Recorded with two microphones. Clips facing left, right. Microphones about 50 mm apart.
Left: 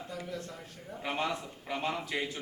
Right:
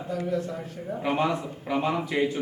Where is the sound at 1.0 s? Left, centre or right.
Centre.